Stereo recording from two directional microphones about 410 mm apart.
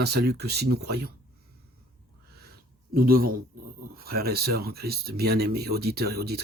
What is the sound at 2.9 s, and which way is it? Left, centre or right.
Speech, right.